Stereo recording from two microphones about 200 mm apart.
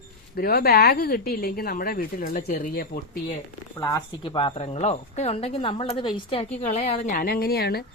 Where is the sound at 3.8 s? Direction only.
15° left (ahead or behind); by 7.8 s 50° left (ahead or behind).